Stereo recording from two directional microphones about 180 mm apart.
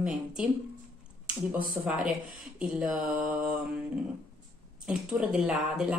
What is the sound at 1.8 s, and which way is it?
Speech, 5° right (ahead or behind).